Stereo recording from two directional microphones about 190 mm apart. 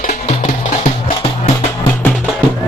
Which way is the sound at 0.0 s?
40° left (ahead or behind).